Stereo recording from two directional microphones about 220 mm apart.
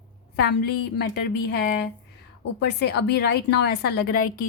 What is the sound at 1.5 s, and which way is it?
Speech, 50° left (ahead or behind).